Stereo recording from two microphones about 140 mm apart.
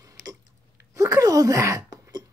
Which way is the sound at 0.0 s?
25° right (ahead or behind).